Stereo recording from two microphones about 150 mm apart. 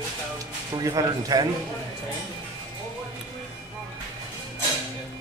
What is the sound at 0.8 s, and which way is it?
Speech, 25° right (ahead or behind).